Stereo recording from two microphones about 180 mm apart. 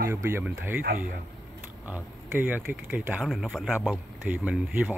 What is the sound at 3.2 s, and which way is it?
Speech, centre (ahead or behind).